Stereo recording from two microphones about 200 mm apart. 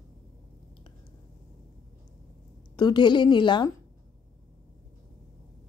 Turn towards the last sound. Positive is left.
turn(degrees=20)  # may be behind; listen again after turning